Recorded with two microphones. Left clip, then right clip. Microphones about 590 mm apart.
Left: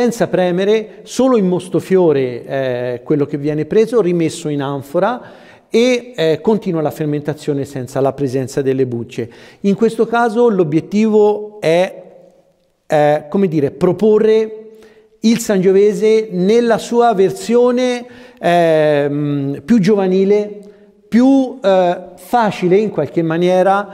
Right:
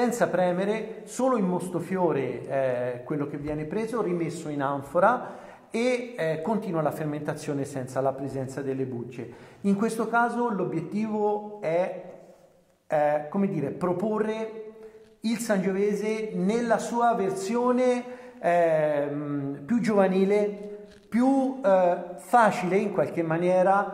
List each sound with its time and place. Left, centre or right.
0.0 s a man's voice: left
12.9 s a man's voice: left
15.2 s a man's voice: left